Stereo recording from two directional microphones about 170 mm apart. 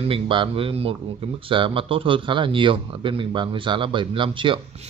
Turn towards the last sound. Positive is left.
turn(degrees=-30)  # may be behind; listen again after turning